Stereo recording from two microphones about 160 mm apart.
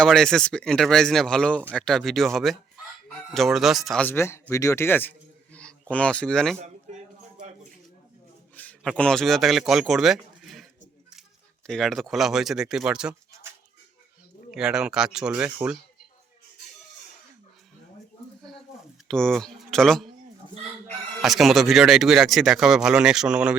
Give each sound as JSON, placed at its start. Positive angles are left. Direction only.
{"t": 0.0, "sound": "a man's voice", "side_deg": 5}
{"t": 7.3, "sound": "a sound", "side_deg": -50}
{"t": 8.5, "sound": "a man's voice", "side_deg": 5}
{"t": 14.5, "sound": "a man's voice", "side_deg": -5}
{"t": 19.0, "sound": "speech", "side_deg": 5}
{"t": 21.2, "sound": "a man's voice", "side_deg": 0}